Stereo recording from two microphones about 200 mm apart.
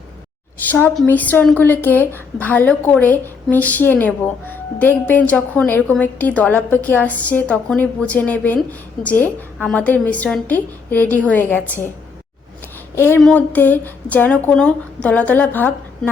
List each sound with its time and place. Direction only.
0.7 s a woman's voice: 10° left (ahead or behind)
13.0 s a woman's voice: 10° left (ahead or behind)